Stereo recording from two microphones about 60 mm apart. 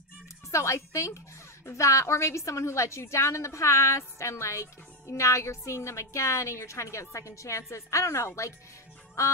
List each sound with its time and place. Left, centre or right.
0.5 s a woman's voice: left